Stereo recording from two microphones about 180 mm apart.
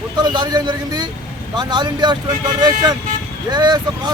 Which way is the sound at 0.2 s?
25° right (ahead or behind).